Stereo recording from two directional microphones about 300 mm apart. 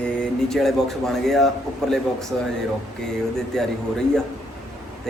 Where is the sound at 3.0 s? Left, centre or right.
Centre.